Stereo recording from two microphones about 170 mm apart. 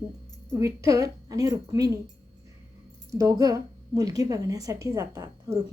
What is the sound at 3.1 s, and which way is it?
A woman's voice, 20° right (ahead or behind).